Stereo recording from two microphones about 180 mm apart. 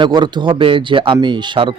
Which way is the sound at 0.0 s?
25° right (ahead or behind).